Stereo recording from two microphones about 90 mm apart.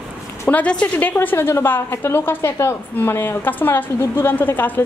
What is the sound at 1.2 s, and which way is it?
A woman's voice, 25° left (ahead or behind).